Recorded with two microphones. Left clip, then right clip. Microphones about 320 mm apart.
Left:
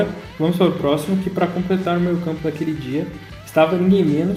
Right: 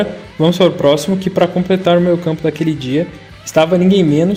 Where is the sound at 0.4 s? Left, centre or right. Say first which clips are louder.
Right 7 dB; right.